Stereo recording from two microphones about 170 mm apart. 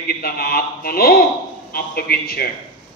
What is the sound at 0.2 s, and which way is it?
A man's voice, 65° left (ahead or behind).